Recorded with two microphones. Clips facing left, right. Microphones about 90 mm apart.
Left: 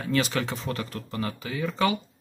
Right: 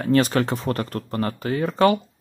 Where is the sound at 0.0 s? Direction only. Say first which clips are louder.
Right 7 dB; 45° right (ahead or behind).